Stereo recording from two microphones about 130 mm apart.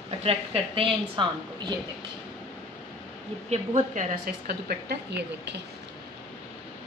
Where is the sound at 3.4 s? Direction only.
70° right (ahead or behind).